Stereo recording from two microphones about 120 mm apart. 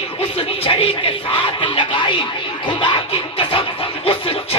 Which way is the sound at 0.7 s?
50° left (ahead or behind).